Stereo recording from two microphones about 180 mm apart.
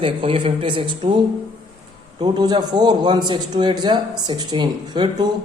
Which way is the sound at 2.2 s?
25° right (ahead or behind).